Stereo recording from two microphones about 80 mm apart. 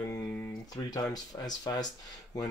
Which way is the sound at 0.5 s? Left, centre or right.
Left.